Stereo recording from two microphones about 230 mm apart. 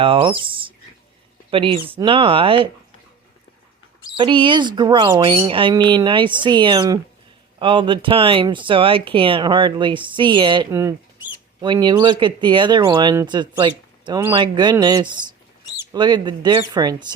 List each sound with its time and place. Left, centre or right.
0.0 s speech: right
4.2 s speech: right